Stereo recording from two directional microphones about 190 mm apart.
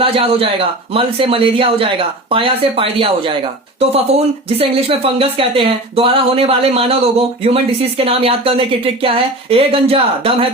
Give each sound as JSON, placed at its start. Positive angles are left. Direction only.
{"t": 0.0, "sound": "speech", "side_deg": -30}